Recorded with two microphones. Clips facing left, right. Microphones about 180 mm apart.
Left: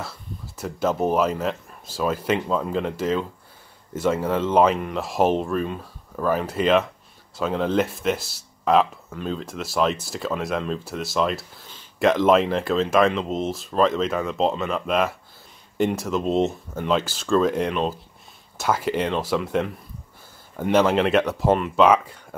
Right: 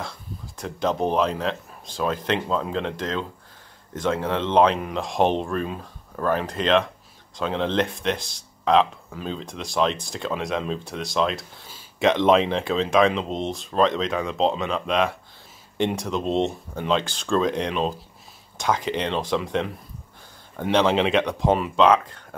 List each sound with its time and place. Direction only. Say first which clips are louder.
0.0 s speech: even; 5° left (ahead or behind)